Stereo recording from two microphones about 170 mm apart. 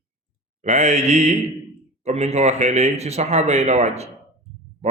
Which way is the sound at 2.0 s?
40° right (ahead or behind).